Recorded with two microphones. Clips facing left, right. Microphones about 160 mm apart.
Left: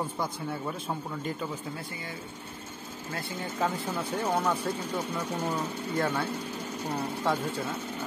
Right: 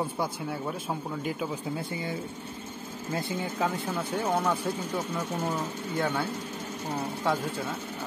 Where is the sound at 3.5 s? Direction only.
Centre (ahead or behind).